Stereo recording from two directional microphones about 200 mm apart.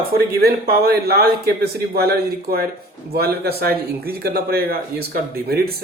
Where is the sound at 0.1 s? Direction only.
50° right (ahead or behind).